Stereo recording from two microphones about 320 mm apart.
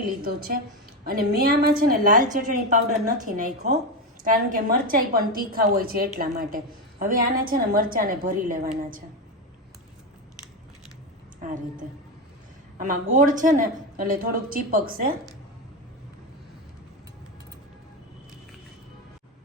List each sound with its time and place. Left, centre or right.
0.2 s a woman's voice: right
11.4 s a woman's voice: right